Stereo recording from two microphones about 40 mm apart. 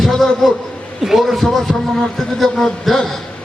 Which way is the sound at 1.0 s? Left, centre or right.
Centre.